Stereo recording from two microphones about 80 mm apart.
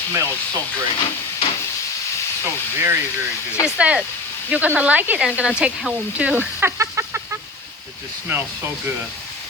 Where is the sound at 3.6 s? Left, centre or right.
Centre; by 7.2 s right.